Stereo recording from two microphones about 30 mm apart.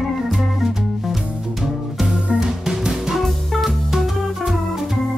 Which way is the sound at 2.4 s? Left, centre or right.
Centre.